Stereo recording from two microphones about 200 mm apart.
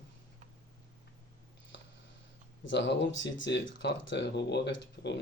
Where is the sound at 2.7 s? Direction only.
65° left (ahead or behind).